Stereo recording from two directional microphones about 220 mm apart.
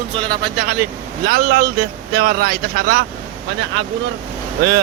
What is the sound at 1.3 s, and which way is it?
Speech, 40° right (ahead or behind).